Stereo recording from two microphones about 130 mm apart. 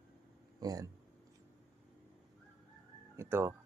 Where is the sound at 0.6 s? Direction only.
30° right (ahead or behind).